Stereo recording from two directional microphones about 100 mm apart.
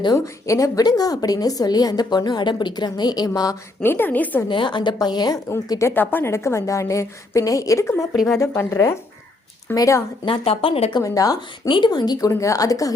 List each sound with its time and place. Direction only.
0.4 s a woman's voice: 35° left (ahead or behind)
3.8 s a woman's voice: 20° left (ahead or behind)
4.4 s a woman's voice: 55° left (ahead or behind); by 5.9 s 35° left (ahead or behind)
5.9 s a woman's voice: 20° left (ahead or behind)
8.1 s speech: centre (ahead or behind)
8.4 s a woman's voice: 30° left (ahead or behind)
10.2 s speech: 70° left (ahead or behind)
11.0 s a woman's voice: 35° left (ahead or behind)
11.7 s a woman's voice: 45° left (ahead or behind)
12.3 s a woman's voice: 30° left (ahead or behind)